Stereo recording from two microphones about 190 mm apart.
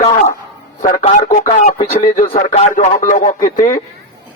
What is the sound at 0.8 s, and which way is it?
A man's voice, 45° left (ahead or behind).